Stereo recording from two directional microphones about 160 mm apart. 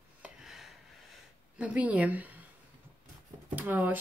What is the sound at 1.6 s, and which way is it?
Speech, 10° right (ahead or behind).